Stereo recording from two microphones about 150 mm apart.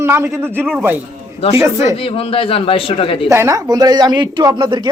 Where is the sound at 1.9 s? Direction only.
40° left (ahead or behind).